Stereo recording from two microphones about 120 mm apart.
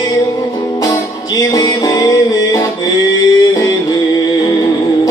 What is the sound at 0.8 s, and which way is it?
Music, 30° left (ahead or behind).